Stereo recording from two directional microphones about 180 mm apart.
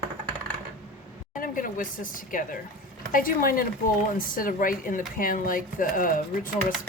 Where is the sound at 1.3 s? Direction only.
50° left (ahead or behind).